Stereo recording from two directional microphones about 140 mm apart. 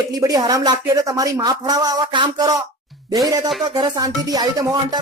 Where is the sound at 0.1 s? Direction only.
25° right (ahead or behind).